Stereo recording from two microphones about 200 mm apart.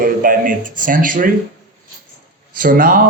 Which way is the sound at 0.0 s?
45° right (ahead or behind).